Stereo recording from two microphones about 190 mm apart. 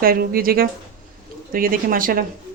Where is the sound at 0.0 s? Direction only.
50° right (ahead or behind).